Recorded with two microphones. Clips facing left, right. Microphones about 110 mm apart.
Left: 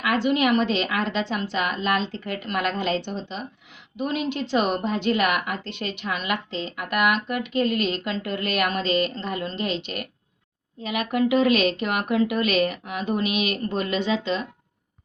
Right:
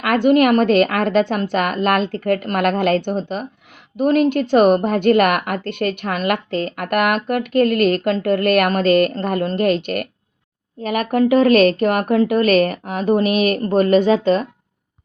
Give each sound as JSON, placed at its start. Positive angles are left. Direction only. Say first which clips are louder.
{"t": 0.0, "sound": "a woman's voice", "louder": "right 8 dB", "side_deg": -55}